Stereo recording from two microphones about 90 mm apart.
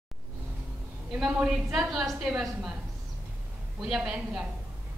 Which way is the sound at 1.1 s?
10° right (ahead or behind).